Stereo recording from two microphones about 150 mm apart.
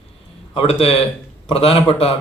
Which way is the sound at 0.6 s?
40° left (ahead or behind).